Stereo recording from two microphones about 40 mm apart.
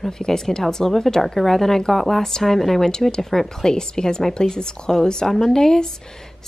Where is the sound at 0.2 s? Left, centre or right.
Centre.